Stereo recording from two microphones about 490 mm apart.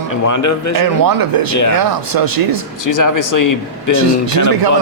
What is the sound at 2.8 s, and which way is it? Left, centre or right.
Speech, left.